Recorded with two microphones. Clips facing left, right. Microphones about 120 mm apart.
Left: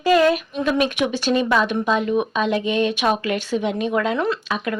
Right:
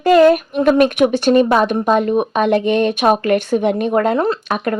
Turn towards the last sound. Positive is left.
turn(degrees=-50)  # may be behind; listen again after turning